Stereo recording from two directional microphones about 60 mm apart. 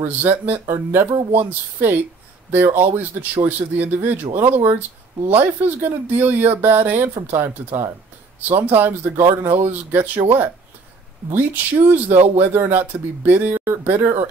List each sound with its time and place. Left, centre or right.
0.0 s a woman's voice: right